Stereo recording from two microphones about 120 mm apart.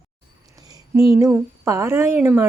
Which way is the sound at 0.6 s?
30° right (ahead or behind).